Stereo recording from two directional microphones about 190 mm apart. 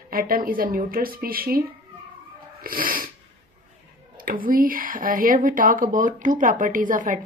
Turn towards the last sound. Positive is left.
turn(degrees=-45)  # may be behind; listen again after turning